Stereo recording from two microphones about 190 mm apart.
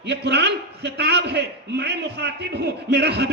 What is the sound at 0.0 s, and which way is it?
A man's voice, 60° right (ahead or behind).